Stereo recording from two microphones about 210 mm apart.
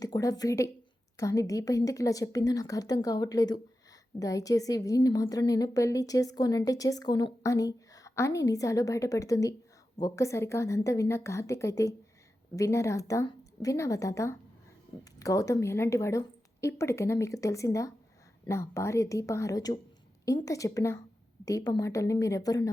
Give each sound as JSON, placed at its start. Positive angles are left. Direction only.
{"t": 0.0, "sound": "a woman's voice", "side_deg": 15}